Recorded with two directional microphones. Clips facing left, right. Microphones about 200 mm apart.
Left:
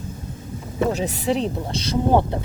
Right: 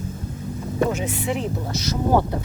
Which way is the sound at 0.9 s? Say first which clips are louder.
Left 3 dB; 40° left (ahead or behind).